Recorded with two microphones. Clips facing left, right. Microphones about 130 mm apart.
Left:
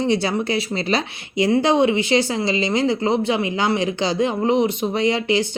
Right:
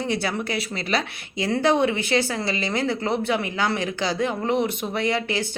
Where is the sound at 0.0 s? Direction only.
25° left (ahead or behind).